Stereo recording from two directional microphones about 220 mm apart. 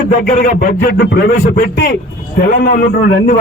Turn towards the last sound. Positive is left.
turn(degrees=45)  # may be behind; listen again after turning